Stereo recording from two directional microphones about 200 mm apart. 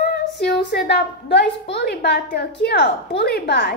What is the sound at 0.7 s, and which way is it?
A woman's voice, 55° left (ahead or behind).